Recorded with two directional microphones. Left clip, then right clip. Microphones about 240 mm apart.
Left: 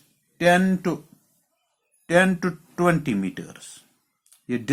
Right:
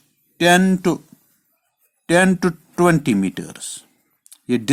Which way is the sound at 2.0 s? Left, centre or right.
Right.